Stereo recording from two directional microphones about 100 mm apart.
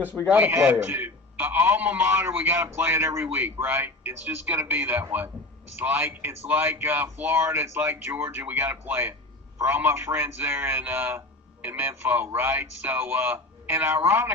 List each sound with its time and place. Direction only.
0.3 s a man's voice: 15° right (ahead or behind)